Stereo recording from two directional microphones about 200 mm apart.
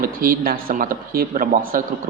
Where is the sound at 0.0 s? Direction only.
45° right (ahead or behind).